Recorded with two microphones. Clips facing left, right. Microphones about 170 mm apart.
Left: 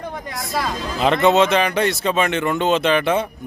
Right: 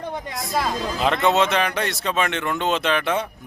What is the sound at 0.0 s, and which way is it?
Hubbub, 25° right (ahead or behind).